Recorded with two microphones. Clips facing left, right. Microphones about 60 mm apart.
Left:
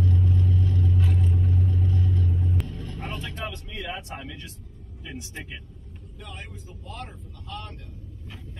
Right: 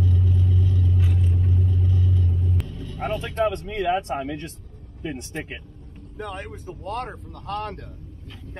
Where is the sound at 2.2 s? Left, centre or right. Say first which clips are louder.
Even; centre.